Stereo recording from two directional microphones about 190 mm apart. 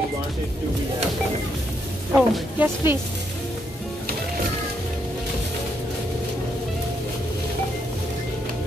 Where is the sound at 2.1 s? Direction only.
5° right (ahead or behind).